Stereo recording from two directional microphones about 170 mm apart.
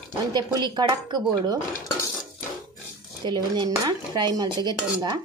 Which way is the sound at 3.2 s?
25° right (ahead or behind).